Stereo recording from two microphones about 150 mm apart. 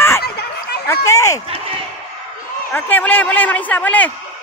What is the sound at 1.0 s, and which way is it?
Speech, 20° left (ahead or behind).